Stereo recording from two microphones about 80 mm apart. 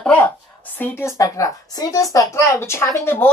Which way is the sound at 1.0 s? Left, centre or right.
Left.